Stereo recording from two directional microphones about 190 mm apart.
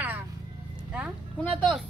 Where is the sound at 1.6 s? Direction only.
Centre (ahead or behind).